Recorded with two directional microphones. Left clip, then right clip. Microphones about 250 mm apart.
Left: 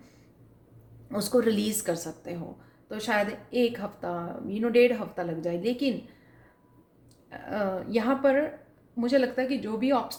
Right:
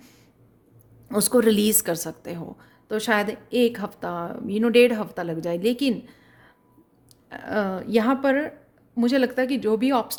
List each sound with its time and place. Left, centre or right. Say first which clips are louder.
1.0 s a woman's voice: right 5 dB; right
7.3 s a woman's voice: right 4 dB; right